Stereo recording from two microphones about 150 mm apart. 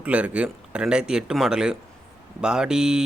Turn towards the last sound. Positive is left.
turn(degrees=-5)  # may be behind; listen again after turning